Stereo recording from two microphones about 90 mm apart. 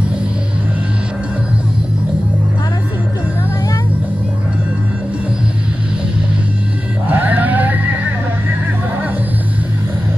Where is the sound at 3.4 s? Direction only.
35° left (ahead or behind).